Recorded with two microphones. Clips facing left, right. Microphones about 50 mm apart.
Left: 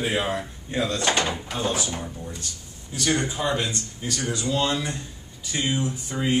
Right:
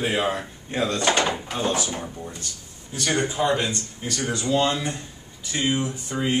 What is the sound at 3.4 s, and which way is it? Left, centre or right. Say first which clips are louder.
Speech: right 4 dB; centre.